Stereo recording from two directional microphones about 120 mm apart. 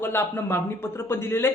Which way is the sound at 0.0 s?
20° left (ahead or behind).